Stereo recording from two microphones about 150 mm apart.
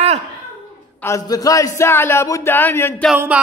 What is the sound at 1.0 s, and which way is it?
Speech, 20° left (ahead or behind).